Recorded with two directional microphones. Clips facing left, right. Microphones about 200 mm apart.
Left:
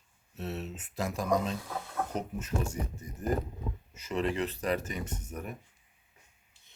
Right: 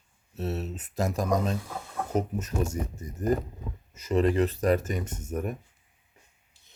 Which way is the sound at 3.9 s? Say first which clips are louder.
Right 8 dB; 40° right (ahead or behind).